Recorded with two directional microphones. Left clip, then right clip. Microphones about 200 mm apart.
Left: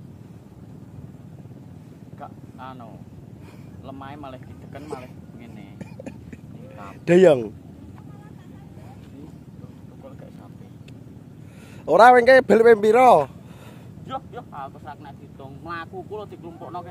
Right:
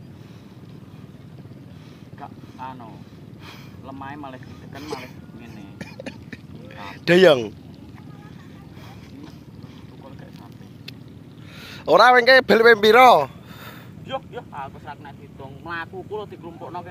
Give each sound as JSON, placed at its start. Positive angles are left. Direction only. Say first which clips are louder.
{"t": 3.8, "sound": "speech", "louder": "right 2 dB", "side_deg": 20}
{"t": 5.8, "sound": "a sound", "louder": "right 4 dB", "side_deg": 15}
{"t": 11.8, "sound": "speech", "louder": "left 1 dB", "side_deg": 10}
{"t": 14.0, "sound": "vehicle", "louder": "right 2 dB", "side_deg": 10}
{"t": 15.6, "sound": "speech", "louder": "right 2 dB", "side_deg": 15}